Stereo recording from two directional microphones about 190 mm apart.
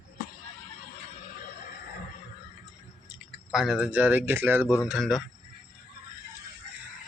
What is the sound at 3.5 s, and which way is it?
Speech, centre (ahead or behind).